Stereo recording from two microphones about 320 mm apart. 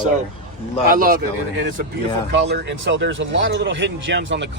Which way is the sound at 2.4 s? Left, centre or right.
Right.